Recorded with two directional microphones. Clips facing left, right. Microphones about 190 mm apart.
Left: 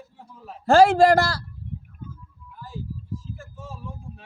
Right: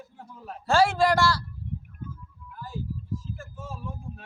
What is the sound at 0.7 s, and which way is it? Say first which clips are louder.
Speech: left 7 dB; 50° left (ahead or behind).